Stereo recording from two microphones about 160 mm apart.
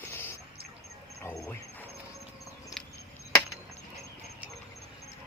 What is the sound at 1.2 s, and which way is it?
Speech, 15° left (ahead or behind).